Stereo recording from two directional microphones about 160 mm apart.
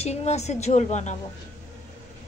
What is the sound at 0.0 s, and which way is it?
A woman's voice, 45° left (ahead or behind).